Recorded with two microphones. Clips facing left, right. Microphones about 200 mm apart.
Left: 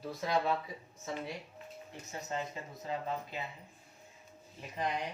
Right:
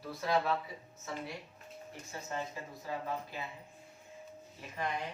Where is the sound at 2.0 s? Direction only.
20° left (ahead or behind).